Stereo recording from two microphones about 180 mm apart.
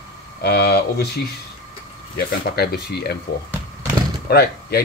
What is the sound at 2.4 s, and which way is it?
Speech, 60° left (ahead or behind).